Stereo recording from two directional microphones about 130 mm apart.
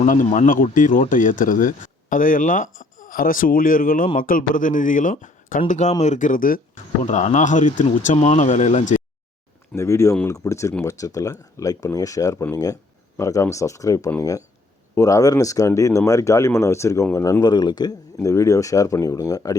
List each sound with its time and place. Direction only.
0.0 s speech: 75° left (ahead or behind)
7.0 s speech: 65° left (ahead or behind)
9.7 s speech: 20° left (ahead or behind)